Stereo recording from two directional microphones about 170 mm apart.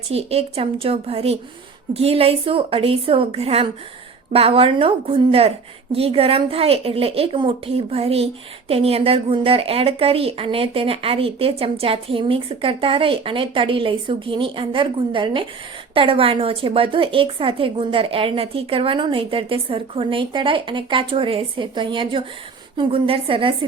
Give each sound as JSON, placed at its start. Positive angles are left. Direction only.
{"t": 0.1, "sound": "a woman's voice", "side_deg": -35}